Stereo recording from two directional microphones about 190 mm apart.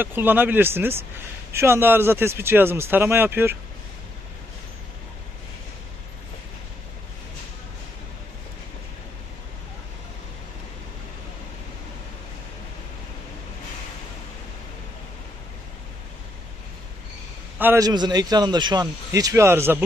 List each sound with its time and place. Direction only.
0.0 s speech: 10° right (ahead or behind)
17.6 s a man's voice: 15° right (ahead or behind)